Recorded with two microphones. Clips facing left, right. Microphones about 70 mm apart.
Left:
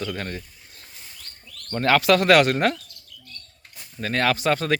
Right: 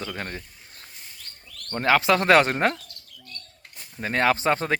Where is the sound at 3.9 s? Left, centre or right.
Right.